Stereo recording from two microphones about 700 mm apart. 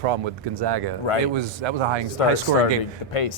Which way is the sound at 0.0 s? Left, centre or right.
Right.